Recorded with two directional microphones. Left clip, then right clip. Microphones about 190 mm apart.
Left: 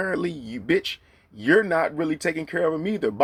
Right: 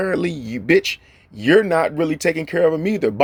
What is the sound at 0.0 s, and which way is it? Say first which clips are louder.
Speech: right 5 dB; 35° right (ahead or behind).